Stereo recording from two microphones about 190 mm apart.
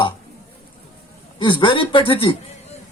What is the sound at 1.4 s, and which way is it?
A man's voice, 25° left (ahead or behind).